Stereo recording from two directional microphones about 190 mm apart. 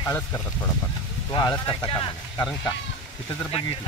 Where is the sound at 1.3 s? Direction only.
20° left (ahead or behind).